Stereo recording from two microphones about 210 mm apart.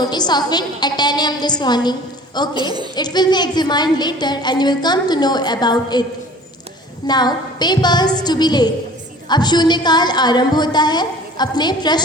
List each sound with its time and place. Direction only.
0.0 s a woman's voice: 20° left (ahead or behind)
7.1 s a woman's voice: 20° left (ahead or behind)